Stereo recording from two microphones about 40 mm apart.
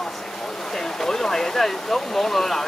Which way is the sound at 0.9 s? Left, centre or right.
Centre.